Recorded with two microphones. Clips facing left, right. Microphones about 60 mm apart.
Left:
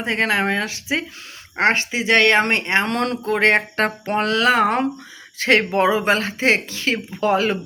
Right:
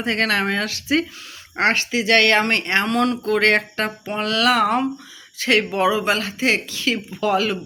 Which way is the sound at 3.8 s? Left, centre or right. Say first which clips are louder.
Left 4 dB; left.